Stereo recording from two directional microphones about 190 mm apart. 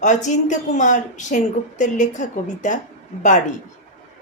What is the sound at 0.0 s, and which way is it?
A woman's voice, 40° left (ahead or behind).